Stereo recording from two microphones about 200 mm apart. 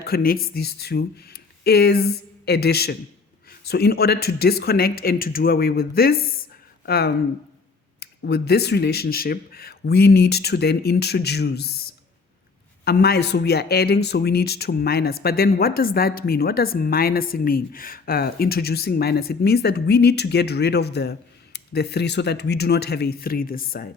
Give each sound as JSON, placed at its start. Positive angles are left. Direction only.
{"t": 0.0, "sound": "speech", "side_deg": 50}
{"t": 12.8, "sound": "speech", "side_deg": 55}